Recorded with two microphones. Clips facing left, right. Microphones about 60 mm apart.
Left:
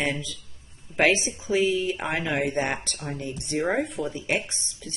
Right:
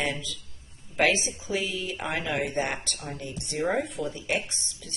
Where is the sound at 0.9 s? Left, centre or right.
Left.